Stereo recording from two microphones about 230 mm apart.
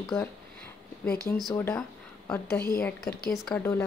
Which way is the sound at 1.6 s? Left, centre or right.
Centre.